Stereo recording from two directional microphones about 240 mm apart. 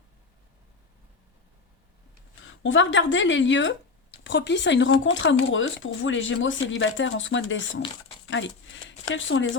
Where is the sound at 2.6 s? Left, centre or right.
Left.